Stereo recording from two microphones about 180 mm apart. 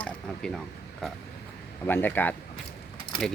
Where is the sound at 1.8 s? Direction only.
10° left (ahead or behind).